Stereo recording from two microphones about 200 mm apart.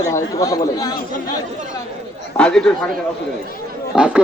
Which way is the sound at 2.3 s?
5° left (ahead or behind).